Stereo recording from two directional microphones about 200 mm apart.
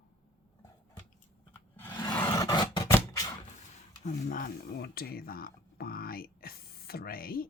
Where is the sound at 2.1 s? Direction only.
15° left (ahead or behind).